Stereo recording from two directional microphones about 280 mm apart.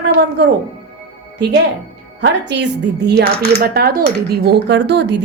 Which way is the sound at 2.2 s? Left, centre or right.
Right.